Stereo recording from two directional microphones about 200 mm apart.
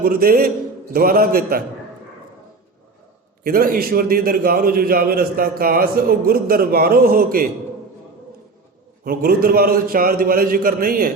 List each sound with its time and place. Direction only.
0.0 s a man's voice: 50° right (ahead or behind)
3.4 s a man's voice: 45° right (ahead or behind)
9.0 s a man's voice: 45° right (ahead or behind)